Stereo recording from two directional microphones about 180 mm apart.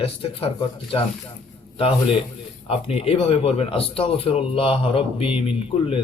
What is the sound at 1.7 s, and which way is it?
A man's voice, 30° left (ahead or behind).